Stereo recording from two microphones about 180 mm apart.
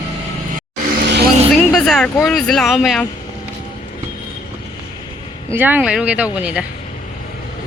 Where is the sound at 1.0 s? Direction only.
70° right (ahead or behind).